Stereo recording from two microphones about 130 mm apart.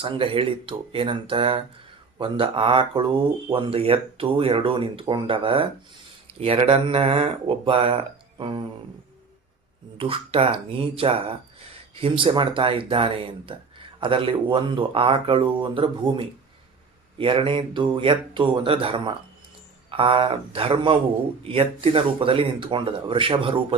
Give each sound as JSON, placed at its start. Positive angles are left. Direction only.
{"t": 0.0, "sound": "speech", "side_deg": -45}
{"t": 10.0, "sound": "speech", "side_deg": -45}